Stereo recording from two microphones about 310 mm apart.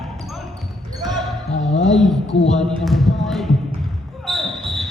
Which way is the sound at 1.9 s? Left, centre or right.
Centre.